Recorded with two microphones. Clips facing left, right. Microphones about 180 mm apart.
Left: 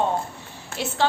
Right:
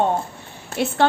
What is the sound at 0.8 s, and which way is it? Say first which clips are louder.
Speech: right 7 dB; 55° right (ahead or behind).